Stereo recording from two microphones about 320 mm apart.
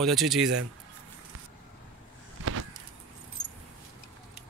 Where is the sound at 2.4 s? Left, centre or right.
Right.